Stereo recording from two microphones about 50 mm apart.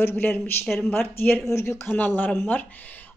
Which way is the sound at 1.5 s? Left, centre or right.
Left.